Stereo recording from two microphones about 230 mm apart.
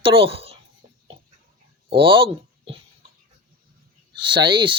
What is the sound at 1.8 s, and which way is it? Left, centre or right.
Speech, right.